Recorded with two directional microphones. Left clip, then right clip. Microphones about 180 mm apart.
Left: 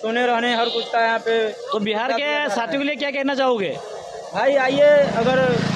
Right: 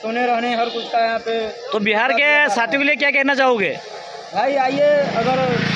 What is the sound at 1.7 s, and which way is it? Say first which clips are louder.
A man's voice: right 6 dB; 5° right (ahead or behind).